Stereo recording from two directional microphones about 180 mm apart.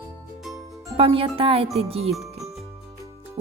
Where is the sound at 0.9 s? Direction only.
30° right (ahead or behind).